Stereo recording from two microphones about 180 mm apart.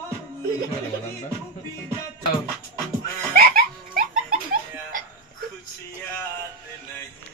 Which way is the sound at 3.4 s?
55° right (ahead or behind).